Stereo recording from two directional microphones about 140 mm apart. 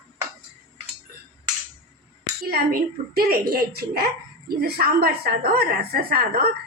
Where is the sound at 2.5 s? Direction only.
90° right.